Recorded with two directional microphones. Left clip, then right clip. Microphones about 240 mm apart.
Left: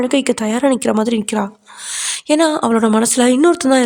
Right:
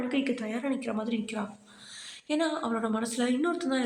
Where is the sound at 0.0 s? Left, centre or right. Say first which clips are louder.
Left 15 dB; left.